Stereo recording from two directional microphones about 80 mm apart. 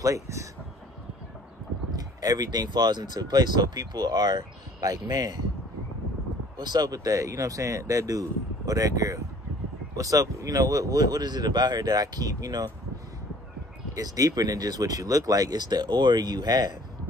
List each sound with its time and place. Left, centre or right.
0.0 s speech: right
2.0 s speech: right
6.6 s speech: right
13.9 s speech: right